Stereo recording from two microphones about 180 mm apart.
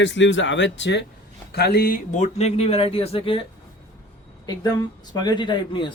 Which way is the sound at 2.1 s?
40° left (ahead or behind).